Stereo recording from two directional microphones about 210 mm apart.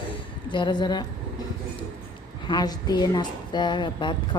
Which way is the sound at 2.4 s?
20° left (ahead or behind).